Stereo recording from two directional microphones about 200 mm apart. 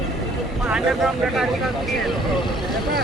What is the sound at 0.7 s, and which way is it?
Speech, 5° right (ahead or behind).